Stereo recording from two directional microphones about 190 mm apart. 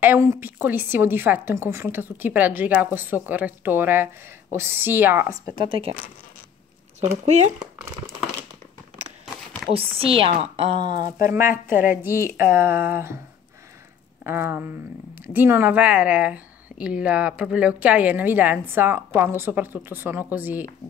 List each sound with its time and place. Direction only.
0.0 s speech: 10° right (ahead or behind)
5.7 s a woman's voice: 30° right (ahead or behind)
7.0 s speech: 35° right (ahead or behind)
9.2 s a sound: centre (ahead or behind)
9.8 s a woman's voice: 30° right (ahead or behind)
11.0 s a woman's voice: 45° left (ahead or behind)
11.3 s speech: 10° right (ahead or behind)
11.6 s a woman's voice: 45° left (ahead or behind)
12.3 s speech: 10° right (ahead or behind)
14.2 s speech: 10° right (ahead or behind)